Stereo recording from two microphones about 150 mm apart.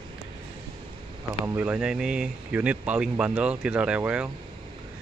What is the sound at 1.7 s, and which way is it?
Speech, 5° right (ahead or behind).